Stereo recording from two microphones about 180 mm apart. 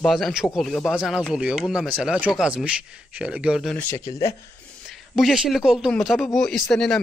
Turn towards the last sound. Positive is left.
turn(degrees=0)  # may be behind; listen again after turning